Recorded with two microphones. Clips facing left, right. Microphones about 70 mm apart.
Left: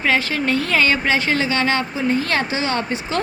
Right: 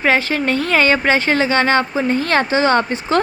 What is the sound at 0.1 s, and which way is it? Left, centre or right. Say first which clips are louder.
Speech: right 2 dB; right.